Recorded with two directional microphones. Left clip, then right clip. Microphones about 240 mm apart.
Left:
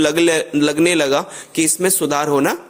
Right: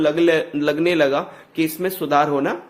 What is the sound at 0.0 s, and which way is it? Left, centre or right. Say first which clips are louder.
A man's voice: left 2 dB; left.